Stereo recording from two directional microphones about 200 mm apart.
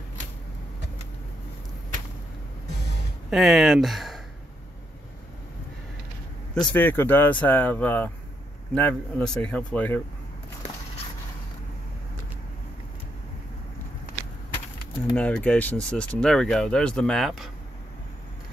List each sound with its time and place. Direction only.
3.3 s speech: centre (ahead or behind)
6.5 s speech: 5° left (ahead or behind)
15.1 s speech: 5° left (ahead or behind)